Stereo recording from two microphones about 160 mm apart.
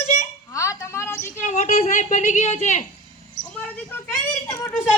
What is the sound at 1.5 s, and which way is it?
A woman's voice, 50° left (ahead or behind).